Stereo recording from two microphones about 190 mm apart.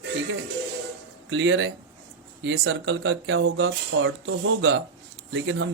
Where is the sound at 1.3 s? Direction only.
80° right.